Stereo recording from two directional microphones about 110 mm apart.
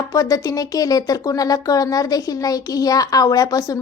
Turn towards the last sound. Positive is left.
turn(degrees=30)  # may be behind; listen again after turning